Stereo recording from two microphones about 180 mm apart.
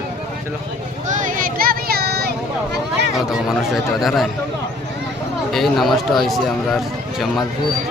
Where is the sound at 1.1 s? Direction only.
45° right (ahead or behind); by 2.3 s 60° right (ahead or behind).